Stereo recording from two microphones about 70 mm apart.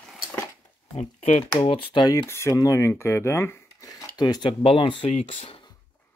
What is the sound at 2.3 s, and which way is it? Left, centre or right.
Speech, left.